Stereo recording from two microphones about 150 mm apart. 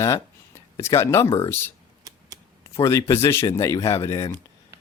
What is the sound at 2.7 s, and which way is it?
Speech, 20° left (ahead or behind).